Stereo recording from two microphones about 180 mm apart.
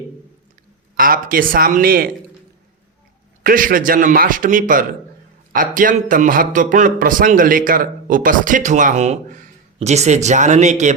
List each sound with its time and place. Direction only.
0.9 s a man's voice: 50° right (ahead or behind)
3.4 s a man's voice: 50° right (ahead or behind)